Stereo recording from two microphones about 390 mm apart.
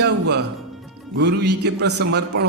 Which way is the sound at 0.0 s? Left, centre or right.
Right.